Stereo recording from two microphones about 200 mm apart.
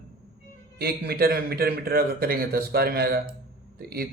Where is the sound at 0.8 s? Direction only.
50° right (ahead or behind).